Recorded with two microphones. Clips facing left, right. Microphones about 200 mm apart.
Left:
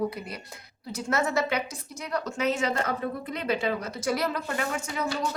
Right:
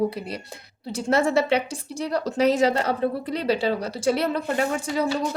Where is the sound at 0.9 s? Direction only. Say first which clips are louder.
Right 6 dB; 30° right (ahead or behind).